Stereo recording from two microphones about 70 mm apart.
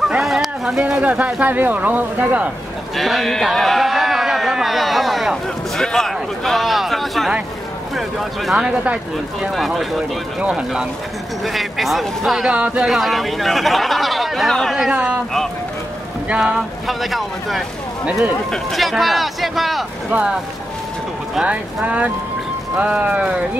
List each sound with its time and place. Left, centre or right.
0.2 s a sound: centre
0.8 s speech: centre
3.0 s a sound: centre
7.9 s speech: centre
8.6 s speech: centre
9.4 s speech: centre
11.4 s speech: centre
12.4 s speech: centre
12.8 s speech: centre
14.9 s speech: centre
16.3 s speech: centre
20.1 s speech: centre
21.4 s speech: centre